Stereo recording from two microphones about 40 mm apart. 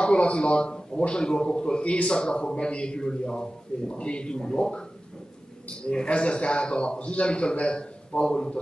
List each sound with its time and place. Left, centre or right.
0.0 s a man's voice: left